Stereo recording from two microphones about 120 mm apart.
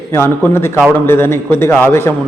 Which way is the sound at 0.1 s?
20° left (ahead or behind).